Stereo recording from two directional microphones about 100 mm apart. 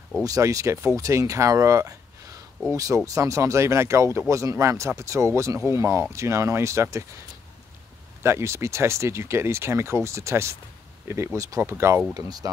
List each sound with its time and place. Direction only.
0.2 s speech: 35° right (ahead or behind)
8.2 s speech: 25° right (ahead or behind)